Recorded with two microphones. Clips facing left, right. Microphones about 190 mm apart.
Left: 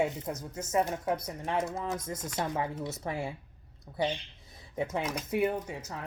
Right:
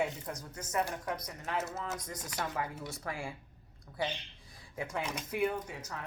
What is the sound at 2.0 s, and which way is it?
A woman's voice, 25° left (ahead or behind).